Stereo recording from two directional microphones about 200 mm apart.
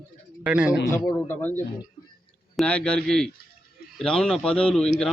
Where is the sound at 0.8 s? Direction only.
15° left (ahead or behind).